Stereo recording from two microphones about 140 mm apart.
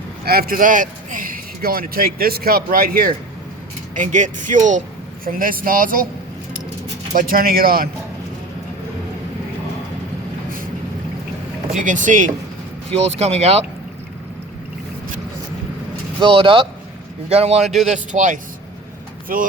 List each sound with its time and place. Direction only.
0.3 s speech: 90° right
3.9 s speech: 65° right (ahead or behind)
5.2 s speech: 90° right
7.1 s speech: 85° right
11.7 s speech: 65° right (ahead or behind)
12.9 s speech: 50° right (ahead or behind)
16.2 s speech: 40° right (ahead or behind)
17.6 s a man's voice: centre (ahead or behind)
17.9 s speech: 60° right (ahead or behind)